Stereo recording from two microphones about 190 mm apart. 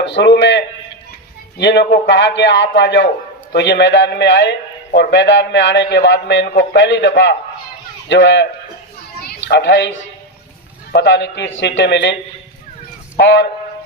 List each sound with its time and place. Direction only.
0.0 s a man's voice: 65° left (ahead or behind)
13.1 s a man's voice: 70° left (ahead or behind)